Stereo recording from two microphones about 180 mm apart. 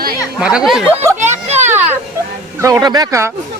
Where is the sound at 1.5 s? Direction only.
40° right (ahead or behind).